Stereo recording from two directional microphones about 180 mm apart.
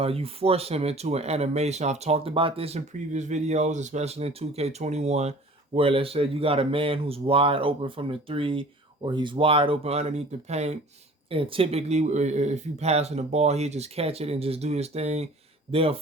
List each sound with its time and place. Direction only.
0.0 s speech: 35° right (ahead or behind)